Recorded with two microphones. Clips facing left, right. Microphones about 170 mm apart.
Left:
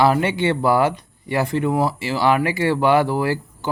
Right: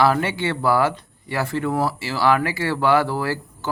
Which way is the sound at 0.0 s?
20° left (ahead or behind).